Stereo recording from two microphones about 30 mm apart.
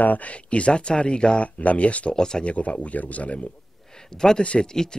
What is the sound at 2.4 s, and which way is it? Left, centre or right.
Speech, left.